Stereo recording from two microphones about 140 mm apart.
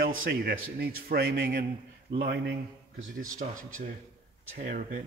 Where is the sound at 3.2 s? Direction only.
70° right (ahead or behind).